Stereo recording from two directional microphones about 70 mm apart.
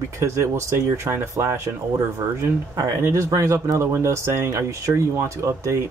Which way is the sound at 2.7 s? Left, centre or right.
Right.